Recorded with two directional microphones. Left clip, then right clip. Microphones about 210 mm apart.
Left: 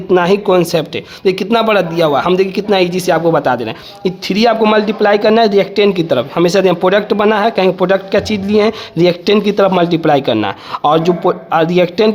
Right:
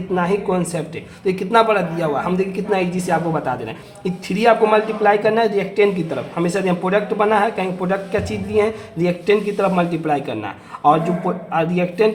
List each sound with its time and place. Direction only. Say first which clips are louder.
0.1 s speech: left 9 dB; 45° left (ahead or behind)